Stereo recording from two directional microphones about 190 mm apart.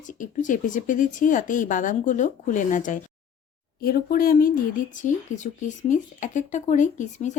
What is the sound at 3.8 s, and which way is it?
Speech, 50° left (ahead or behind).